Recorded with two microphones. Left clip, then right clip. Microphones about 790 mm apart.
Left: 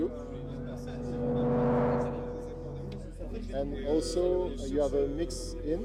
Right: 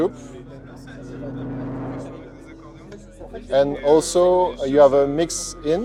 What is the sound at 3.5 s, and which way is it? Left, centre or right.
Speech, right.